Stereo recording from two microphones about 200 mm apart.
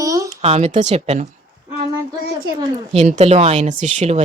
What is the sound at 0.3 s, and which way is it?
Speech, 30° right (ahead or behind).